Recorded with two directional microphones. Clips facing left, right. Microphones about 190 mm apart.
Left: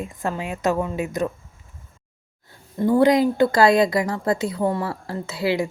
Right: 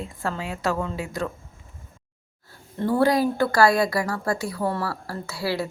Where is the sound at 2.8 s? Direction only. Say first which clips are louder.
Left 4 dB; 15° left (ahead or behind).